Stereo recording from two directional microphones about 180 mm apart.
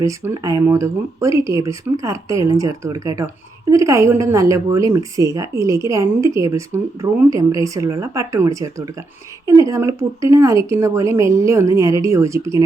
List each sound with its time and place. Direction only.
0.0 s speech: 15° right (ahead or behind)